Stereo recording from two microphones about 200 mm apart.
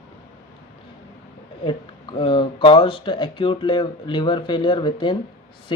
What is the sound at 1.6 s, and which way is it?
Speech, 25° left (ahead or behind).